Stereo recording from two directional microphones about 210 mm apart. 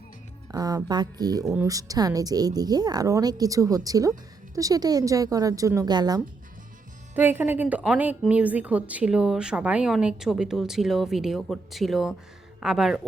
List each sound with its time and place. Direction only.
0.5 s a woman's voice: 15° right (ahead or behind); by 13.0 s centre (ahead or behind)